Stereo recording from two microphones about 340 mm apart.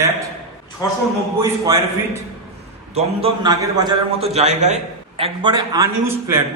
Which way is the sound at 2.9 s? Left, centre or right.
Centre.